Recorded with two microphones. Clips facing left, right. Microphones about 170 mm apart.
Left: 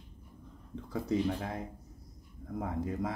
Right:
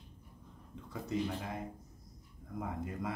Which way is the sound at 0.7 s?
35° left (ahead or behind).